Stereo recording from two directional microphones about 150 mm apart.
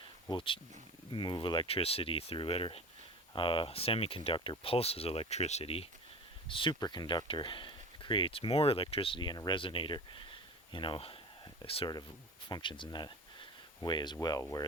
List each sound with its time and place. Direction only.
0.3 s speech: 35° left (ahead or behind)